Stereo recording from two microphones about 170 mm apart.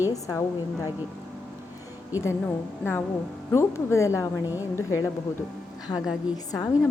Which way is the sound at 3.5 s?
15° left (ahead or behind).